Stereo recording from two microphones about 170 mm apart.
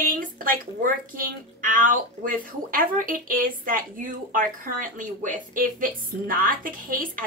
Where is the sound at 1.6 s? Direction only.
50° right (ahead or behind).